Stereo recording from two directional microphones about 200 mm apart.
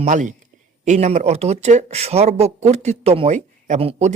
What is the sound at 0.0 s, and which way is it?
Speech, 40° right (ahead or behind).